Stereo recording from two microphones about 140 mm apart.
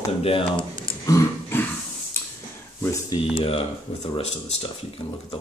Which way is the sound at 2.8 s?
20° left (ahead or behind).